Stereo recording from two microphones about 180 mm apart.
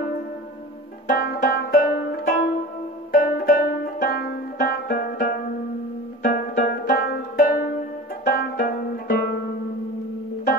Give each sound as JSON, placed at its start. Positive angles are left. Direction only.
{"t": 1.0, "sound": "banjo", "side_deg": 55}
{"t": 6.2, "sound": "music", "side_deg": 50}